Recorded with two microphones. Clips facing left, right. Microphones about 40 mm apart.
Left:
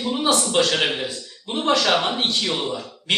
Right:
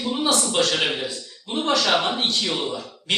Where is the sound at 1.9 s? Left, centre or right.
Centre.